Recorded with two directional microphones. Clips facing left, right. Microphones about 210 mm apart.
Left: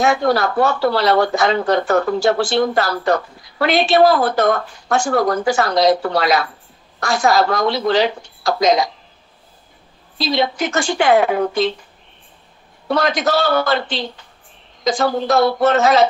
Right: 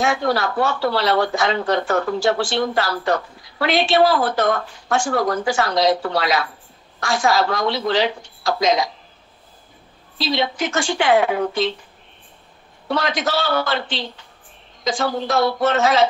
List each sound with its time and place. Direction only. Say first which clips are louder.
0.0 s speech: left 4 dB; 45° left (ahead or behind)
10.1 s speech: left 3 dB; 45° left (ahead or behind)
12.9 s a man's voice: left 4 dB; 40° left (ahead or behind)